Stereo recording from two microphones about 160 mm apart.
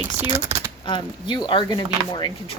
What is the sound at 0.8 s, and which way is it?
Speech, 30° left (ahead or behind).